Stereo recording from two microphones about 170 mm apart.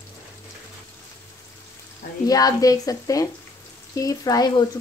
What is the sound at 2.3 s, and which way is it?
Speech, 20° left (ahead or behind).